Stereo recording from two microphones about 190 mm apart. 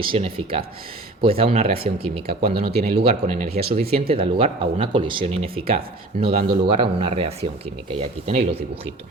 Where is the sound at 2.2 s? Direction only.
55° right (ahead or behind).